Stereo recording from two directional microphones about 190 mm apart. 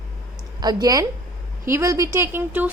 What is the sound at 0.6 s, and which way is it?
A woman's voice, 20° right (ahead or behind).